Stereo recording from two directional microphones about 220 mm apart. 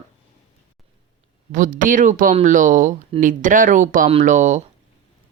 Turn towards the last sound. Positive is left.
turn(degrees=-35)  # may be behind; listen again after turning